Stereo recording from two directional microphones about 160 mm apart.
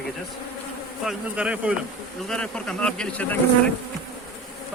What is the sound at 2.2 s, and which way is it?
Speech, 5° left (ahead or behind).